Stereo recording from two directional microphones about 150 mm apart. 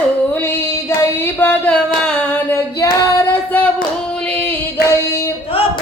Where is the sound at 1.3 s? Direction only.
10° left (ahead or behind).